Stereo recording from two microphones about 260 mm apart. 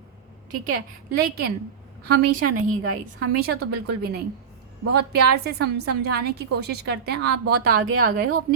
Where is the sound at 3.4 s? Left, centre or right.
Right.